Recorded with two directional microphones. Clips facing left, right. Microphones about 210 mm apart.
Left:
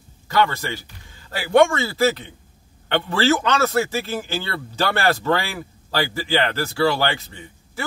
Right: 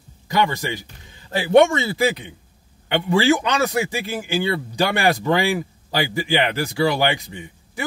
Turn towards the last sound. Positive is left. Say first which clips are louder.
# right 1 dB
turn(degrees=-15)  # may be behind; listen again after turning